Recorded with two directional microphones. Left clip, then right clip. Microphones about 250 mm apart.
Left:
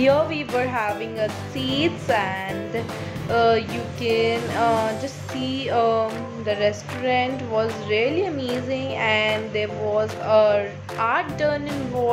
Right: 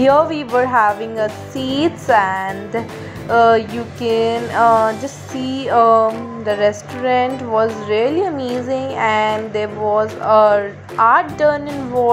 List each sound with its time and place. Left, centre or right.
0.0 s music: centre